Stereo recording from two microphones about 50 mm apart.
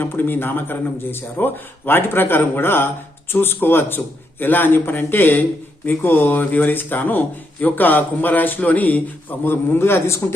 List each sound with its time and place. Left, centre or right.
0.0 s a man's voice: left
9.4 s a man's voice: left